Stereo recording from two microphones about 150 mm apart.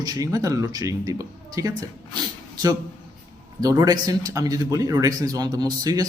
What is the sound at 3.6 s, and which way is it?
Speech, 25° right (ahead or behind).